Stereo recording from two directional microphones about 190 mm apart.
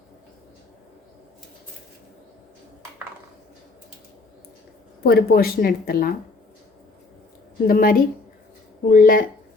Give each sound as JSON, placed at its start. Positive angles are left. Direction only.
{"t": 5.0, "sound": "a woman's voice", "side_deg": 55}
{"t": 7.7, "sound": "a woman's voice", "side_deg": 50}